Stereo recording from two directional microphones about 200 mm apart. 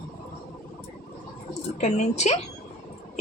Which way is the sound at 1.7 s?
35° left (ahead or behind).